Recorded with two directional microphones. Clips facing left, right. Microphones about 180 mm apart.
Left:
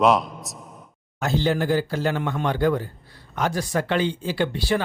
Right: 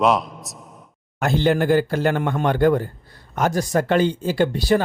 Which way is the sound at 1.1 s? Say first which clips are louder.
Right 4 dB; 55° right (ahead or behind).